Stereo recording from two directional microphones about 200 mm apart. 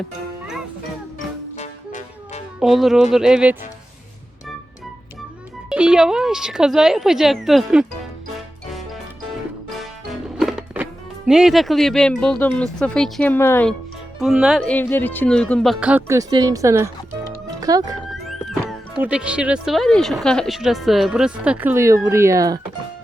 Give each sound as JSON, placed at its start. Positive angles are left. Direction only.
{"t": 1.5, "sound": "music", "side_deg": 35}
{"t": 2.6, "sound": "speech", "side_deg": 0}
{"t": 5.6, "sound": "speech", "side_deg": -5}
{"t": 9.7, "sound": "music", "side_deg": 0}
{"t": 11.3, "sound": "speech", "side_deg": 0}
{"t": 14.2, "sound": "speech", "side_deg": 0}
{"t": 18.1, "sound": "speech", "side_deg": 0}